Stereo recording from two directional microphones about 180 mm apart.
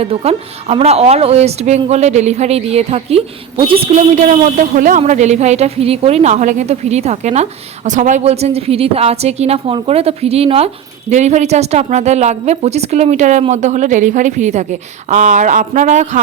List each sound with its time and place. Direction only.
0.0 s a woman's voice: 35° right (ahead or behind)